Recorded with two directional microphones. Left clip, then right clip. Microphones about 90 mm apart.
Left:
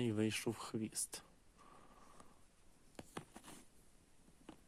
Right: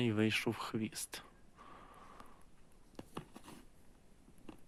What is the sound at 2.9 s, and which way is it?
Writing, 45° left (ahead or behind).